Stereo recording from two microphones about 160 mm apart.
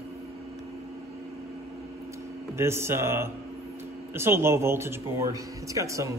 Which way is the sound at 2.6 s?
15° right (ahead or behind).